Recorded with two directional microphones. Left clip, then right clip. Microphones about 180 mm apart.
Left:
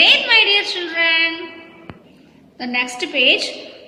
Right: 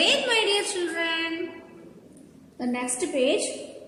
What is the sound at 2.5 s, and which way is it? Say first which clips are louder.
A woman's voice: left 9 dB; centre (ahead or behind).